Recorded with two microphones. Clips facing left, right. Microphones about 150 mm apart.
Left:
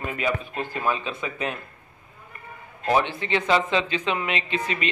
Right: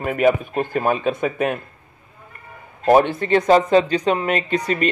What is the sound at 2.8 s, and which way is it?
A man's voice, 45° right (ahead or behind).